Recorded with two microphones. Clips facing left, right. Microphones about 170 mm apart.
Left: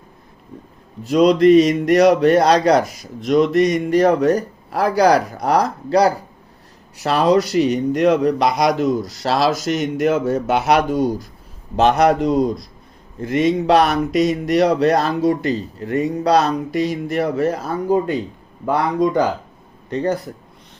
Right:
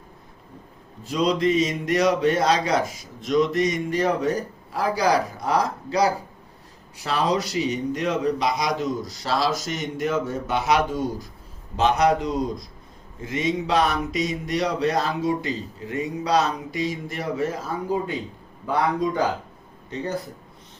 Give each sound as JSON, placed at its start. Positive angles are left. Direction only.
{"t": 1.0, "sound": "a man's voice", "side_deg": 70}